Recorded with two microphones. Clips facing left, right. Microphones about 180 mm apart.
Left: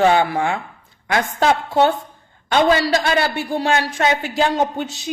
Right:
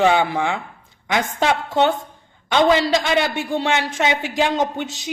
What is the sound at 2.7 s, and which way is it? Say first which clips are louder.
A man's voice: even; 20° right (ahead or behind).